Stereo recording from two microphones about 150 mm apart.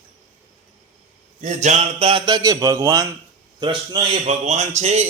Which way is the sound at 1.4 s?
50° right (ahead or behind).